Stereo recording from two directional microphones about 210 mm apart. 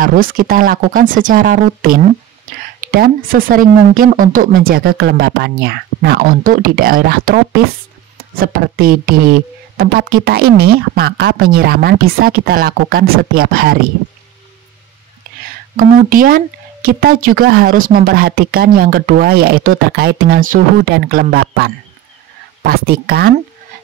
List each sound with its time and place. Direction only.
0.0 s speech: 40° right (ahead or behind)
15.7 s speech: 40° right (ahead or behind)